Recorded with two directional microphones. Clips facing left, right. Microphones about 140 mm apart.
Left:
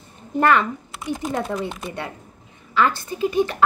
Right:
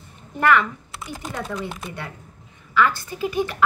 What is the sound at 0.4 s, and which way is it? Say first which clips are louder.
A woman's voice: left 1 dB; 30° left (ahead or behind).